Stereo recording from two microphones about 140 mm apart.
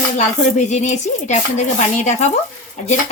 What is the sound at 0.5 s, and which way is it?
Dishes, 55° left (ahead or behind).